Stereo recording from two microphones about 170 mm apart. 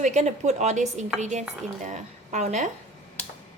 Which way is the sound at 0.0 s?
45° right (ahead or behind).